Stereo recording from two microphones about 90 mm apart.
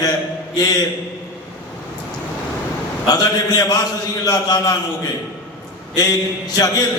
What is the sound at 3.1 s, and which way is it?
A man's voice, 45° left (ahead or behind).